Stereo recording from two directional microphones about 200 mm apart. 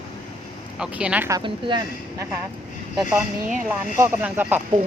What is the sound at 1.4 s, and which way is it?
Speech, 25° right (ahead or behind).